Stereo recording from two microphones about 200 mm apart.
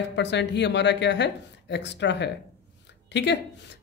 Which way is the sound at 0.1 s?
60° left (ahead or behind).